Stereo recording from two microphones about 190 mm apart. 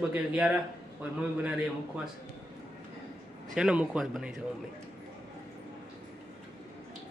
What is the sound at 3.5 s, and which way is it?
Speech, 5° right (ahead or behind).